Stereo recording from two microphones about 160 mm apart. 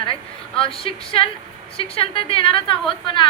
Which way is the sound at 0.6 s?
35° left (ahead or behind).